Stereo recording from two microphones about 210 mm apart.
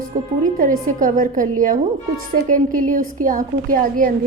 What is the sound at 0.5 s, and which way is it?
A woman's voice, 40° right (ahead or behind).